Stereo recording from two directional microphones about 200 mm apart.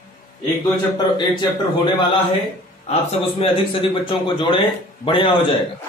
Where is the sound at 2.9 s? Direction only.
30° left (ahead or behind).